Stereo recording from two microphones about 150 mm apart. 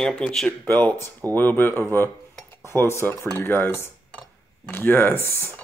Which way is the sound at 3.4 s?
15° left (ahead or behind).